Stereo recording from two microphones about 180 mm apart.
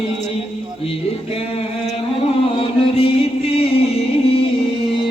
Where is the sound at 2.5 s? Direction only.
30° left (ahead or behind).